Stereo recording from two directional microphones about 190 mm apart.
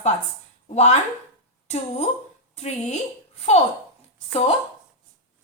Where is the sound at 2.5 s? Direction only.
35° left (ahead or behind).